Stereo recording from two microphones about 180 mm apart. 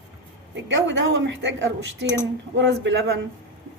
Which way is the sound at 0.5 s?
90° right.